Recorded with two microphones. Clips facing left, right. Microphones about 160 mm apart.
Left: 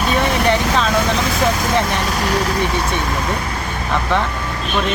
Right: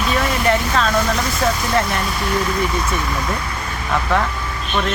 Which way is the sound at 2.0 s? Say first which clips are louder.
Left 2 dB; 90° left.